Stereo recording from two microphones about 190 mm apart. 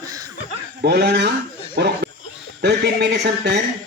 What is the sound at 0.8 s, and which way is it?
Speech, 60° right (ahead or behind).